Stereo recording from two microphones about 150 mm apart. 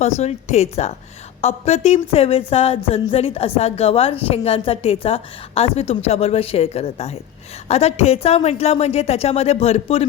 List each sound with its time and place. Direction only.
0.0 s a woman's voice: 50° left (ahead or behind)